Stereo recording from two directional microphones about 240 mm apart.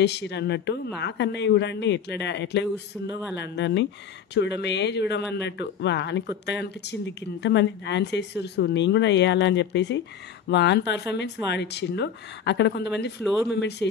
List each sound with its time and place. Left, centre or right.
0.0 s speech: left